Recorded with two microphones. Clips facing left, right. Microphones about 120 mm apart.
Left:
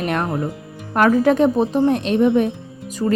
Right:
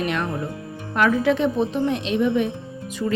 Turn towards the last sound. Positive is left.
turn(degrees=35)  # may be behind; listen again after turning